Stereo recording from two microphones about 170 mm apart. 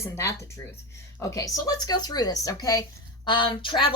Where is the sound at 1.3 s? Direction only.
20° left (ahead or behind).